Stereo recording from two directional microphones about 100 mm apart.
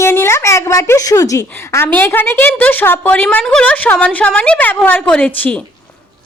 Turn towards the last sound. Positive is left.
turn(degrees=15)  # may be behind; listen again after turning